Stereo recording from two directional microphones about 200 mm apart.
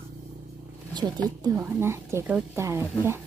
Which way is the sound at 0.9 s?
20° right (ahead or behind).